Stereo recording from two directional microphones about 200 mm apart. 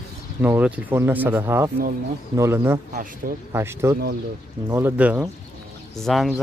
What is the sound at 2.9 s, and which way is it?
Speech, 45° right (ahead or behind).